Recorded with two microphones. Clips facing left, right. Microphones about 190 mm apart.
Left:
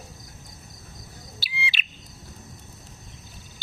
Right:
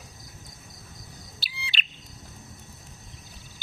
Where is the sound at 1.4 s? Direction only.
Centre (ahead or behind).